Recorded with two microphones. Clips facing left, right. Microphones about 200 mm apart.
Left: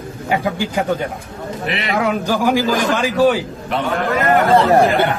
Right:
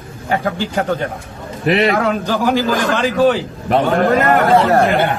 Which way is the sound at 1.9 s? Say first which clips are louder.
Right 1 dB; 10° left (ahead or behind).